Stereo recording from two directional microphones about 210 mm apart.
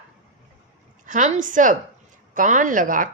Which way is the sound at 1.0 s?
35° right (ahead or behind).